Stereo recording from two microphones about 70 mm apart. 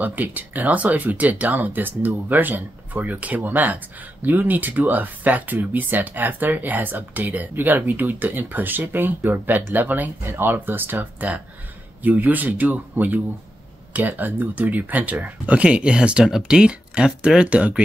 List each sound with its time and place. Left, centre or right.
0.0 s speech: right